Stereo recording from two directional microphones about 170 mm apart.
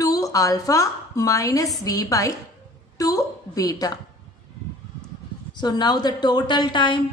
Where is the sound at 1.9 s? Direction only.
20° left (ahead or behind).